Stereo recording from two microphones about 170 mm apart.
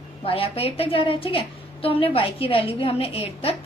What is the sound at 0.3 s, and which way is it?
A woman's voice, 35° left (ahead or behind).